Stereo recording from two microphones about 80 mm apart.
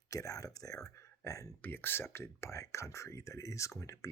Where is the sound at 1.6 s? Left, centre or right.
Left.